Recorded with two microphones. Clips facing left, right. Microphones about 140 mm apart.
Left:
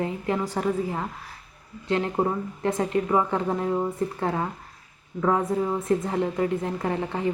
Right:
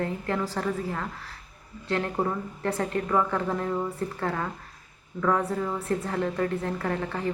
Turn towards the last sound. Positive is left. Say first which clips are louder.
# left 2 dB
turn(degrees=20)  # may be behind; listen again after turning